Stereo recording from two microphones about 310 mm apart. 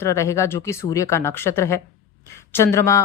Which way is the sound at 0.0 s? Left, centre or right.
Centre.